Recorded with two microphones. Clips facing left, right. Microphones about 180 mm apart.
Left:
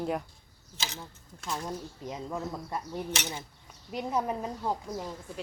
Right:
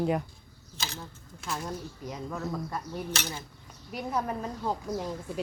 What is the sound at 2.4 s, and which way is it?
Speech, 25° left (ahead or behind).